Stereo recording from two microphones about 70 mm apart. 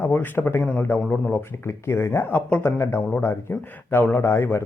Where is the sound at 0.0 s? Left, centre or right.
Left.